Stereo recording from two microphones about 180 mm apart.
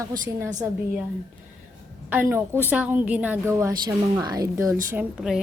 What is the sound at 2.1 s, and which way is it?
A woman's voice, 10° right (ahead or behind).